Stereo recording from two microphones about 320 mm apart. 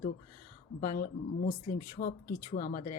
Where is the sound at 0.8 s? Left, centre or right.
Left.